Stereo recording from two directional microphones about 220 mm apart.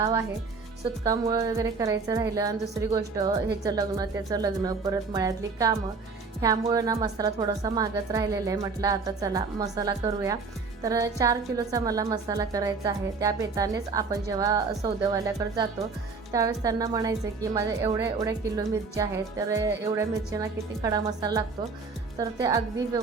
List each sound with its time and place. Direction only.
0.0 s speech: 15° right (ahead or behind)
6.4 s speech: 15° right (ahead or behind)